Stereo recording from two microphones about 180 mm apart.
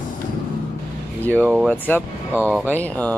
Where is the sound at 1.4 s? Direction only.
5° right (ahead or behind).